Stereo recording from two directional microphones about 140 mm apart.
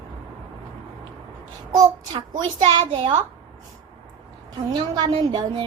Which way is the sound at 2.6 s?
35° right (ahead or behind).